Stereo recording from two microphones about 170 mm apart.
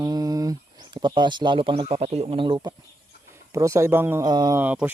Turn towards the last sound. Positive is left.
turn(degrees=-10)  # may be behind; listen again after turning